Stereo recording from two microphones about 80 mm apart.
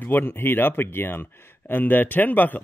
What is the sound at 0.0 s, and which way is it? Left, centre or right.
Speech, left.